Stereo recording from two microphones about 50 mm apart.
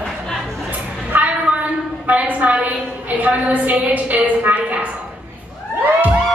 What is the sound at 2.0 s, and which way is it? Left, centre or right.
A woman's voice, right.